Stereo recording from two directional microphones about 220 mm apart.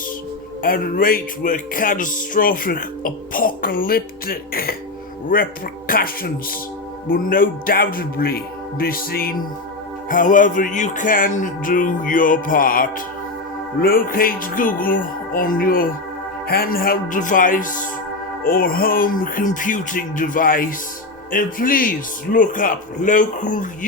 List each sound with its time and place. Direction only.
0.6 s music: 40° left (ahead or behind)
5.9 s music: 40° left (ahead or behind)